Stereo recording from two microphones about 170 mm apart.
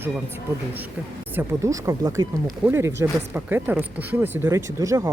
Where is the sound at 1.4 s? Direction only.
20° right (ahead or behind).